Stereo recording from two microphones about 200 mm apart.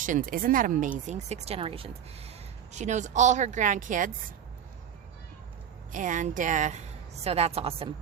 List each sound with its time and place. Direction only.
0.0 s speech: 40° right (ahead or behind)
5.9 s a woman's voice: 40° right (ahead or behind)